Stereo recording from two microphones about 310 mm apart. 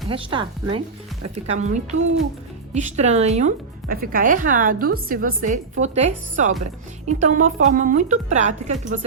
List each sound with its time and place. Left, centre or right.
0.1 s speech: centre